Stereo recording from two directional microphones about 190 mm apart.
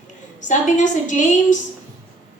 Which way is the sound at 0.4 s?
40° left (ahead or behind).